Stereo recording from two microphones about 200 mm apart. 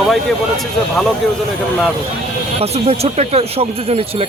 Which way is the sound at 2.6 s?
30° right (ahead or behind).